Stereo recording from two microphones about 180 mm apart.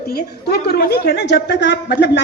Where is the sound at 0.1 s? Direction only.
60° left (ahead or behind).